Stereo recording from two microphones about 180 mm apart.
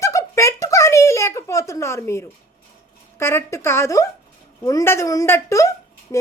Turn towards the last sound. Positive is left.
turn(degrees=15)  # may be behind; listen again after turning